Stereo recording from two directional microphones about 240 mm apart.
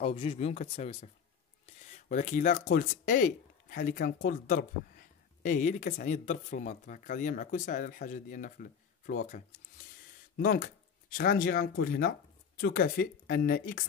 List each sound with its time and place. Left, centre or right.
0.0 s speech: left